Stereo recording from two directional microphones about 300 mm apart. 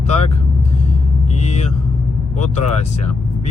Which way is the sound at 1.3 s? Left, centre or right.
Left.